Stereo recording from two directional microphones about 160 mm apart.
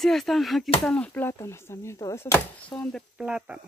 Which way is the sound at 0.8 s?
5° left (ahead or behind).